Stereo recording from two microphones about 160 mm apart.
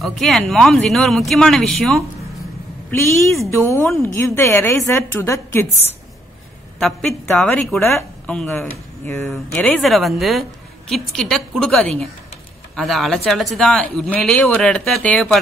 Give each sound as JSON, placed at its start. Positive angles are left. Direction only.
{"t": 0.0, "sound": "speech", "side_deg": 0}
{"t": 2.9, "sound": "a woman's voice", "side_deg": 15}
{"t": 6.8, "sound": "a woman's voice", "side_deg": 0}